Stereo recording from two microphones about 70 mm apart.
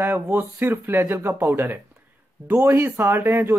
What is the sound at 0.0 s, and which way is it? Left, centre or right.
Speech, right.